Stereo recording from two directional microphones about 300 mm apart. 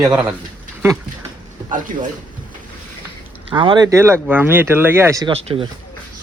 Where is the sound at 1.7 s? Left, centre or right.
Right.